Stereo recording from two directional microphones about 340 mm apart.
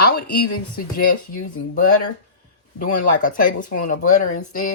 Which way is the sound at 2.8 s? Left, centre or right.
Left.